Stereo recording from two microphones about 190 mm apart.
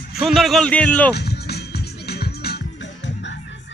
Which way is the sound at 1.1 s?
60° left (ahead or behind).